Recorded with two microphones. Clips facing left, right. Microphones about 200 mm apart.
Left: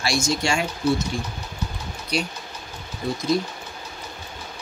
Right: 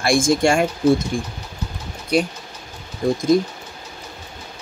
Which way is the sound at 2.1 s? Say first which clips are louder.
Right 8 dB; 50° right (ahead or behind).